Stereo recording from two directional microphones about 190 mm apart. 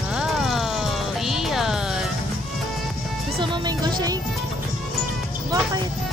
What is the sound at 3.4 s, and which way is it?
Speech, 20° right (ahead or behind).